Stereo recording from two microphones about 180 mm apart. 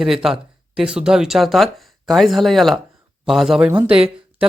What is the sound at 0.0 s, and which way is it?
Speech, centre (ahead or behind).